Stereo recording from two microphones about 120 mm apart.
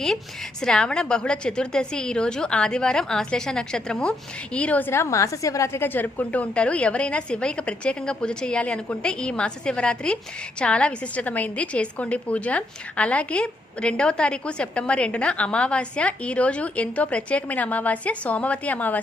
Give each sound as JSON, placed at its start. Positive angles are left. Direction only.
{"t": 0.6, "sound": "a woman's voice", "side_deg": 5}